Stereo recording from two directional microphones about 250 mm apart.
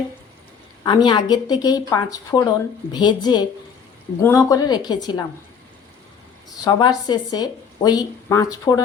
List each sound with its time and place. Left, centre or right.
0.9 s speech: centre
6.7 s speech: centre